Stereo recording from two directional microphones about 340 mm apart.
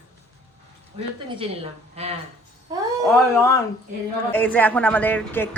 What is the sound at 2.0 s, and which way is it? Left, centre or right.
Speech, centre.